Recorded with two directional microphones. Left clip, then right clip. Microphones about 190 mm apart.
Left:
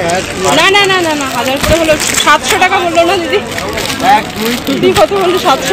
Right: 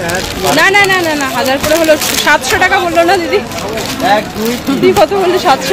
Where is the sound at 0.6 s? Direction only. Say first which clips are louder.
Even; centre (ahead or behind).